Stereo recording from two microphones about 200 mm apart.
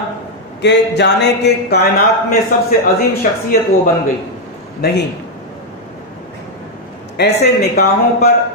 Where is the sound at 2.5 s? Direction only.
45° left (ahead or behind).